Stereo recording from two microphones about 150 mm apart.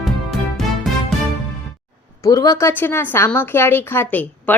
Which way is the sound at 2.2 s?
20° left (ahead or behind).